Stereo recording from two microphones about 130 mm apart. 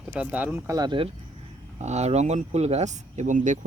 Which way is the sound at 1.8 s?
60° right (ahead or behind).